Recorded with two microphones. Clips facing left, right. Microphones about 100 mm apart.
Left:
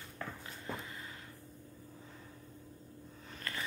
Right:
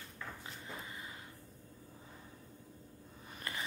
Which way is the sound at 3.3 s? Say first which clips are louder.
Even; 15° right (ahead or behind).